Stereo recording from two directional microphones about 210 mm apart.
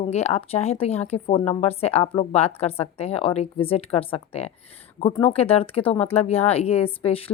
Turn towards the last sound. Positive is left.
turn(degrees=25)  # may be behind; listen again after turning